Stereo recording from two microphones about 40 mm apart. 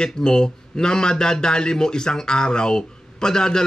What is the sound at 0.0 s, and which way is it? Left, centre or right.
Speech, centre.